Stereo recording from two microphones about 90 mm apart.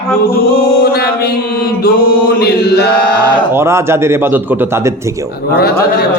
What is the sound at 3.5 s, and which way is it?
Speech, 30° right (ahead or behind).